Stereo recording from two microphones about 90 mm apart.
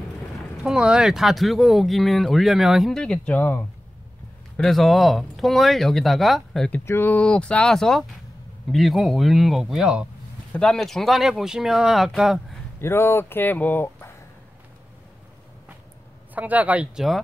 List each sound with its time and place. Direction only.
0.7 s speech: 10° right (ahead or behind)
3.0 s speech: 10° left (ahead or behind)
4.6 s speech: 5° left (ahead or behind)
6.9 s speech: 20° left (ahead or behind); by 10.0 s 10° right (ahead or behind)
10.5 s speech: 5° left (ahead or behind)
12.8 s speech: 25° left (ahead or behind)
16.3 s speech: 15° right (ahead or behind)